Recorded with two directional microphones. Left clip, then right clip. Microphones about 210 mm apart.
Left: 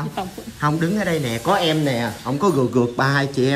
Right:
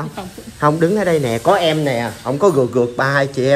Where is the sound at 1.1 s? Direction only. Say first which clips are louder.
Right 6 dB; 55° right (ahead or behind).